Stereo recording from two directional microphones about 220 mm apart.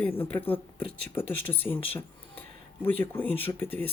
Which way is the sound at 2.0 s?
10° left (ahead or behind).